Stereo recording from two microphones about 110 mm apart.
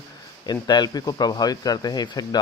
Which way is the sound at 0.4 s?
40° left (ahead or behind).